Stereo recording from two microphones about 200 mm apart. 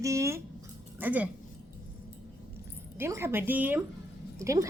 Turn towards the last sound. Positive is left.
turn(degrees=-15)  # may be behind; listen again after turning